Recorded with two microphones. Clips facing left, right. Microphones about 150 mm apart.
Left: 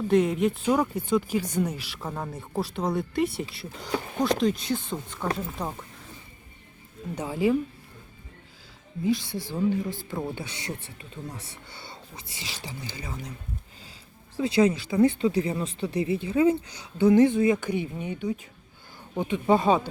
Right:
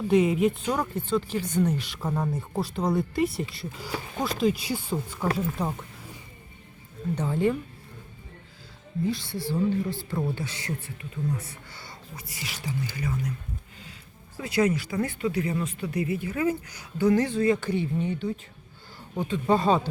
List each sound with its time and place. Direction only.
0.1 s speech: centre (ahead or behind)
7.2 s speech: 5° left (ahead or behind)
9.0 s speech: 20° left (ahead or behind)
14.3 s speech: 30° left (ahead or behind)